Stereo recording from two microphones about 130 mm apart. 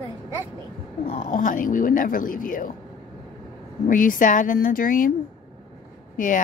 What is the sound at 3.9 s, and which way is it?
Speech, 90° left.